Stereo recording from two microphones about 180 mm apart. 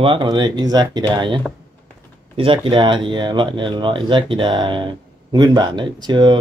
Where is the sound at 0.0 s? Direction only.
30° right (ahead or behind).